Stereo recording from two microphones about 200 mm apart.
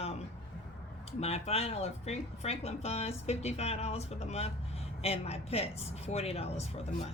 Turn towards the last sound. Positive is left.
turn(degrees=30)  # may be behind; listen again after turning